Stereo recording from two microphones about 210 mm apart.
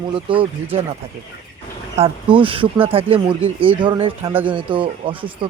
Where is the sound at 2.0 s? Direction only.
25° right (ahead or behind).